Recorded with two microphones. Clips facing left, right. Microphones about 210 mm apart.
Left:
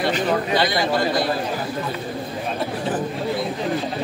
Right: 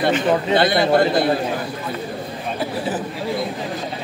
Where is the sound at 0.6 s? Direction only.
55° right (ahead or behind).